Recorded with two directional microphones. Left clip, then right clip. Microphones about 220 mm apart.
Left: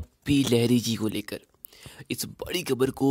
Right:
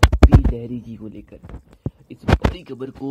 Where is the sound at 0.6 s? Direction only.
25° left (ahead or behind).